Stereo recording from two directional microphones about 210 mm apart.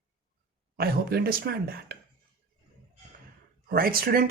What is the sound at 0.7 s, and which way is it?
Speech, 45° right (ahead or behind).